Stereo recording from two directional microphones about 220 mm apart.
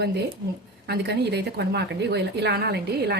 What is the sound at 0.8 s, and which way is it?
Speech, 50° right (ahead or behind).